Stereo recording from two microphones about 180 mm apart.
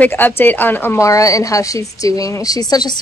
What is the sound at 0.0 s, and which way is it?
A woman's voice, 10° left (ahead or behind).